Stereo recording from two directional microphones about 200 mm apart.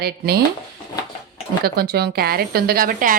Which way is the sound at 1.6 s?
50° right (ahead or behind).